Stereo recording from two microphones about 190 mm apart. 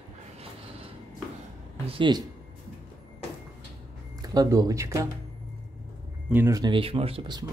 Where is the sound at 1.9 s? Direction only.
25° right (ahead or behind).